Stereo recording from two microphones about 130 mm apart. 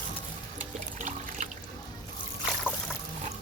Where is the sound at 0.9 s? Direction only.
65° right (ahead or behind).